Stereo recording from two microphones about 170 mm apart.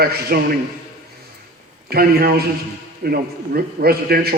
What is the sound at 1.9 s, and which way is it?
A man's voice, 65° right (ahead or behind).